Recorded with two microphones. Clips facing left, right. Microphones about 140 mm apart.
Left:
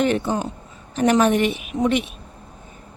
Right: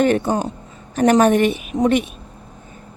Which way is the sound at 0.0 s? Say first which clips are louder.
Right 4 dB; 45° right (ahead or behind).